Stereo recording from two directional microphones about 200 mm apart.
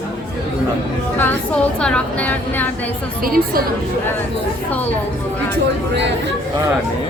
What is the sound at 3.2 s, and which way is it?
Speech, 50° right (ahead or behind).